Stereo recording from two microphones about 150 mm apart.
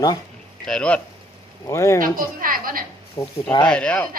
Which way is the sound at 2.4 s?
70° right (ahead or behind).